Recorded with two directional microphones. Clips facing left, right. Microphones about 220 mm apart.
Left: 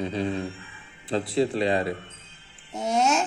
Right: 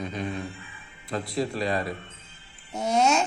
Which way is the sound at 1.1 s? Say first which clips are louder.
Left 5 dB; 30° left (ahead or behind).